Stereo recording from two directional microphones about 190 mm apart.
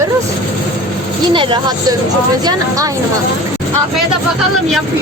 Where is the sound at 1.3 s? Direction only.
25° right (ahead or behind).